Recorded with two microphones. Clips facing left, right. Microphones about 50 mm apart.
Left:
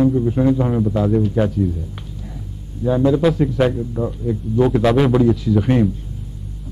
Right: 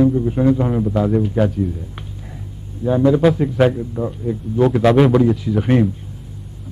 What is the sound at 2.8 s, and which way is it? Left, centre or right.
Speech, right.